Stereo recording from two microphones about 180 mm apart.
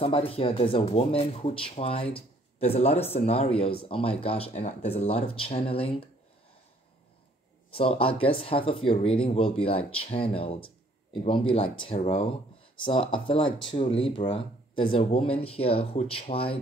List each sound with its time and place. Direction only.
0.0 s speech: 30° left (ahead or behind)
7.7 s speech: 30° left (ahead or behind)